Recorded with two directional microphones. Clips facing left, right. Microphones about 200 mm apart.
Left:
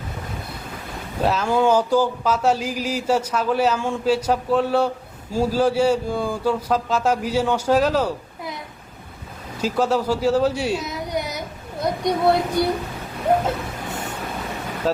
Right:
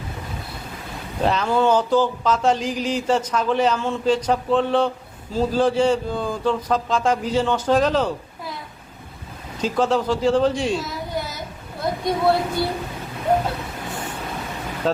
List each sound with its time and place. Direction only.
1.2 s speech: 5° left (ahead or behind)
9.6 s speech: 10° left (ahead or behind)
10.8 s a sound: 20° left (ahead or behind)
14.8 s speech: 5° left (ahead or behind)